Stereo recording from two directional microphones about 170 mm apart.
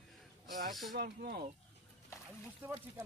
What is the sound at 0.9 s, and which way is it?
Speech, 65° right (ahead or behind).